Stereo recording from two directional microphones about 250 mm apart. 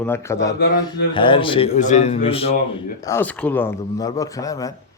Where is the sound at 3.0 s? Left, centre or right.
Centre.